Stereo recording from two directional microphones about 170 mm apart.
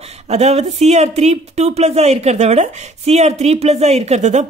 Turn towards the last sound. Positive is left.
turn(degrees=-40)  # may be behind; listen again after turning